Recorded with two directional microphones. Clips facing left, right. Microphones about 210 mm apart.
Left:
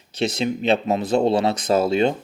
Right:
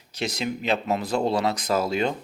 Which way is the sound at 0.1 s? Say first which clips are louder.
Left 6 dB; 25° left (ahead or behind).